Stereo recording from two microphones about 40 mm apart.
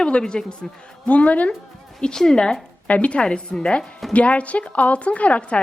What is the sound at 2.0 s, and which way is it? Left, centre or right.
Speech, centre.